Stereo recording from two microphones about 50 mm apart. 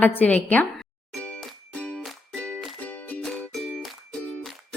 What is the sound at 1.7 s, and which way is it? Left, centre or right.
Music, left.